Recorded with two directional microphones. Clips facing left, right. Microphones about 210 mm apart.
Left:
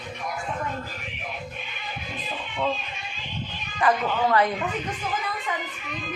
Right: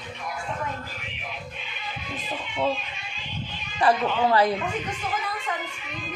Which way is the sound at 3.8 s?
30° right (ahead or behind).